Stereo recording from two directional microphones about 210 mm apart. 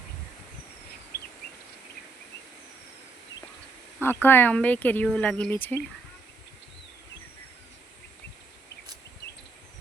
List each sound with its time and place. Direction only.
1.1 s bird: 45° left (ahead or behind)
4.0 s speech: 10° left (ahead or behind)